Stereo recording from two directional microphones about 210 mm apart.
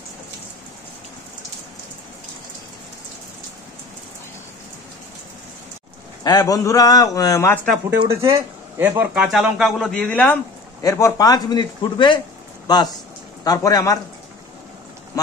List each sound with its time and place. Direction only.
6.2 s a man's voice: 15° left (ahead or behind)
8.1 s a man's voice: 15° right (ahead or behind); by 13.9 s 15° left (ahead or behind)